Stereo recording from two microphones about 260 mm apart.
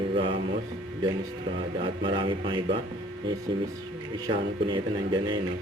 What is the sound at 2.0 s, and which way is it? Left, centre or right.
Speech, centre.